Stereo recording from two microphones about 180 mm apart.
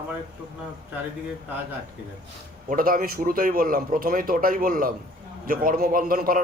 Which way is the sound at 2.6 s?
50° right (ahead or behind).